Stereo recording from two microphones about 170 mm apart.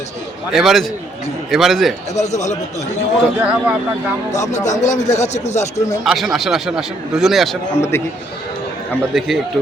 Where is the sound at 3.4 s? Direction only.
5° right (ahead or behind).